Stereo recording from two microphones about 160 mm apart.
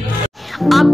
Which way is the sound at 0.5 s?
Centre (ahead or behind).